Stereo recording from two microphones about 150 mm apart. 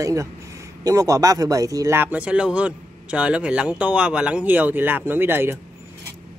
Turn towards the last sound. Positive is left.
turn(degrees=-15)  # may be behind; listen again after turning